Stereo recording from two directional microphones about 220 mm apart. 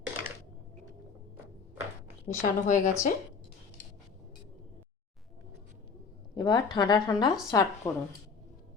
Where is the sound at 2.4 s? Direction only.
35° left (ahead or behind).